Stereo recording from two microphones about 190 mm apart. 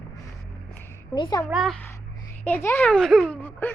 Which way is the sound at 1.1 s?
20° left (ahead or behind).